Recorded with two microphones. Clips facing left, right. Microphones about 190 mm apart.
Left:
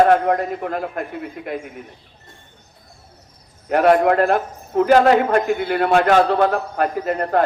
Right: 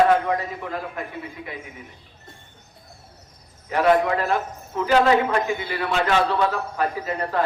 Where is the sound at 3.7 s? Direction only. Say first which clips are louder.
Left 5 dB; 50° left (ahead or behind).